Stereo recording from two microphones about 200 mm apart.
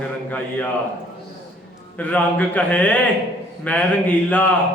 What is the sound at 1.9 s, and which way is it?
A man's voice, 5° left (ahead or behind).